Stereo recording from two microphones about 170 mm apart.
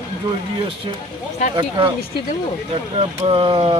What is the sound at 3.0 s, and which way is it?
Speech, 30° right (ahead or behind).